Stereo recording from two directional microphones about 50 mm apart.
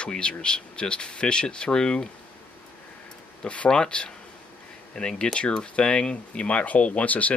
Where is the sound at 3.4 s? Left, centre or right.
Left.